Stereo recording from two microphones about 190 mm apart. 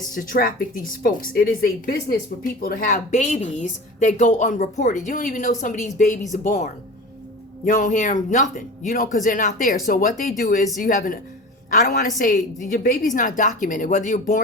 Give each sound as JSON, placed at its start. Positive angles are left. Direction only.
{"t": 0.0, "sound": "a woman's voice", "side_deg": 45}